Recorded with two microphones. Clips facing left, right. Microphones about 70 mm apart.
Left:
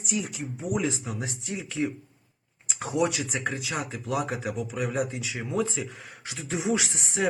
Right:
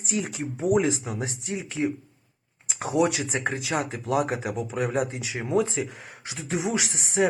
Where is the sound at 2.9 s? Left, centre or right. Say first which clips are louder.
Right 3 dB; right.